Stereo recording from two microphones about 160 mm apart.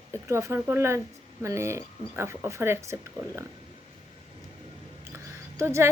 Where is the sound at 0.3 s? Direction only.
20° right (ahead or behind).